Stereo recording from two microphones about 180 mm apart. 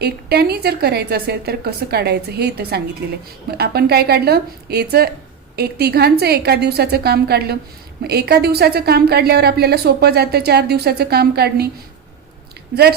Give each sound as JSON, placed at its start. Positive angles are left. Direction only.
{"t": 0.0, "sound": "a woman's voice", "side_deg": -60}